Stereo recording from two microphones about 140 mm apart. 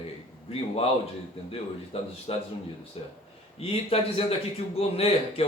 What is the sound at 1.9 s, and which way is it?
Speech, 45° left (ahead or behind).